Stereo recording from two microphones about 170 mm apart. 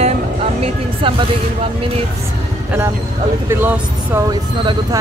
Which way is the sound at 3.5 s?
15° right (ahead or behind).